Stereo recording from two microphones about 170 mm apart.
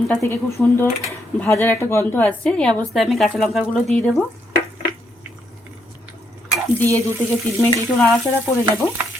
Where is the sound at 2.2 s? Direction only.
5° left (ahead or behind).